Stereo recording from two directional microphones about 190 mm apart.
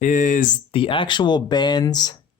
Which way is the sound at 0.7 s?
25° left (ahead or behind).